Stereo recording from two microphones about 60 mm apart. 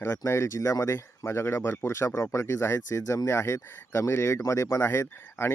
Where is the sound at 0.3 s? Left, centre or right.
Left.